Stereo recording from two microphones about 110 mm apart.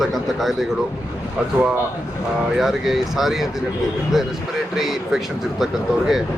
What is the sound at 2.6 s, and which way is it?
Speech, 5° right (ahead or behind).